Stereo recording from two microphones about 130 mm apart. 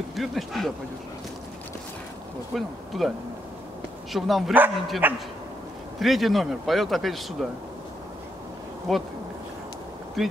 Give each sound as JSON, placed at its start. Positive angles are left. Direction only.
{"t": 0.1, "sound": "a man's voice", "side_deg": 0}
{"t": 2.5, "sound": "a man's voice", "side_deg": 0}
{"t": 4.1, "sound": "a man's voice", "side_deg": 0}
{"t": 5.0, "sound": "speech", "side_deg": -15}
{"t": 5.9, "sound": "a man's voice", "side_deg": 0}
{"t": 8.9, "sound": "a man's voice", "side_deg": 0}
{"t": 10.2, "sound": "a man's voice", "side_deg": 0}